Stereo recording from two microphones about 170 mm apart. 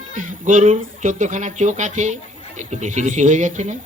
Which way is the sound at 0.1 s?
50° right (ahead or behind).